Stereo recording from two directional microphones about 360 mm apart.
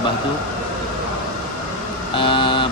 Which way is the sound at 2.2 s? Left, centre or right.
Centre.